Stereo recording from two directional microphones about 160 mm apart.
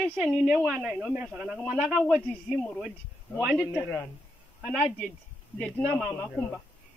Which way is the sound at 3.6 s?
15° left (ahead or behind).